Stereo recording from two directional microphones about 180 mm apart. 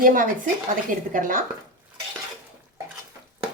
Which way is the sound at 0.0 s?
50° right (ahead or behind).